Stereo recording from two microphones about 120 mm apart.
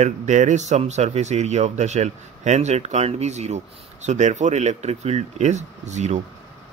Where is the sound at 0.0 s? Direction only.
80° right.